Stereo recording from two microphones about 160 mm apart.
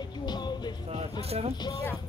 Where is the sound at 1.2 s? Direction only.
40° right (ahead or behind).